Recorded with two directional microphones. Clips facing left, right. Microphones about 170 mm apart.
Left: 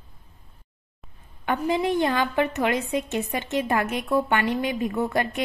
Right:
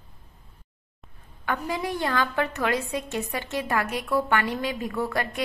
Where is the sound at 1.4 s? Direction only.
20° left (ahead or behind).